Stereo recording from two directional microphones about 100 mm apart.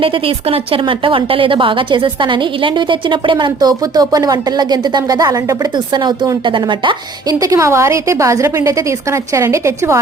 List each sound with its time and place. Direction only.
0.0 s a woman's voice: 65° right (ahead or behind)
7.3 s a woman's voice: 35° right (ahead or behind)